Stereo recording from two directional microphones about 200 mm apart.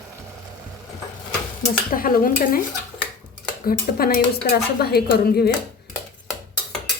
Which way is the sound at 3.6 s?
50° left (ahead or behind).